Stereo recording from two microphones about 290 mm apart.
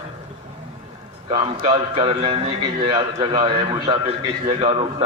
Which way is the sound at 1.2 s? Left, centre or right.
Centre.